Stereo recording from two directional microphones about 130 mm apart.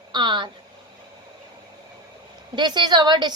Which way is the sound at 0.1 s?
35° right (ahead or behind).